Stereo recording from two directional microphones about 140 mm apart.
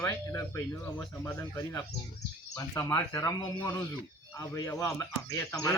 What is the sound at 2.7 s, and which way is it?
Speech, 20° left (ahead or behind).